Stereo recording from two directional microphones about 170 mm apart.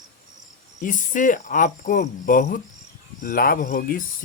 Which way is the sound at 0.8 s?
50° left (ahead or behind).